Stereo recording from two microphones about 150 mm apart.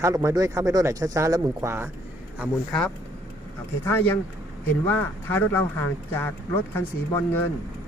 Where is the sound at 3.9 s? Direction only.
15° left (ahead or behind).